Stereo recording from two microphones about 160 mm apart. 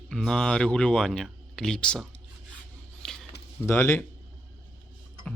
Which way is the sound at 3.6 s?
15° left (ahead or behind).